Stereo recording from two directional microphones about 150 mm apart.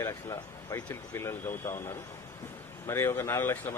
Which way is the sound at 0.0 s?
20° left (ahead or behind).